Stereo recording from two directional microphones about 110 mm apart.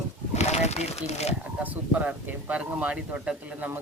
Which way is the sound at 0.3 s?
85° left.